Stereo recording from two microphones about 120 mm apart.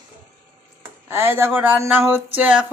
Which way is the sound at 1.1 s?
20° right (ahead or behind).